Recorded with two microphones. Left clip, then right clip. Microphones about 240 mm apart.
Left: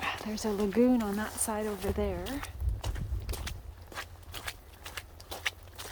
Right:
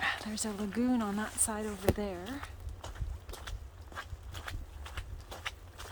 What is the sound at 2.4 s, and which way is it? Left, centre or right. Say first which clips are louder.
Biting: left 4 dB; left.